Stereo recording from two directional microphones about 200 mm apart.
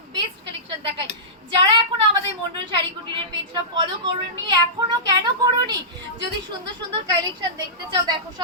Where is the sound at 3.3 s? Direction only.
20° right (ahead or behind).